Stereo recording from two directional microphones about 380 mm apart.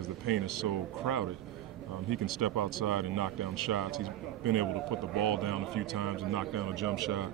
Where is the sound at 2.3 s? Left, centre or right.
Right.